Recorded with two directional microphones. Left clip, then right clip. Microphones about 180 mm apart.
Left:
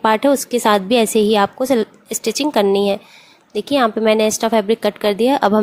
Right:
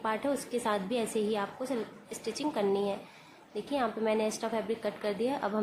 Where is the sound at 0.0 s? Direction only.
50° left (ahead or behind).